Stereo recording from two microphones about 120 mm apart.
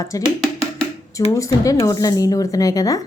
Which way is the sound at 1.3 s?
25° left (ahead or behind).